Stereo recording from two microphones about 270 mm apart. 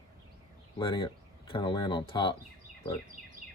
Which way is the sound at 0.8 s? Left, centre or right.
Centre.